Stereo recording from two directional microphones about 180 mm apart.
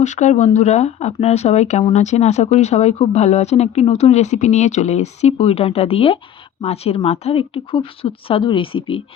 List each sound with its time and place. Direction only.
0.0 s speech: 40° left (ahead or behind)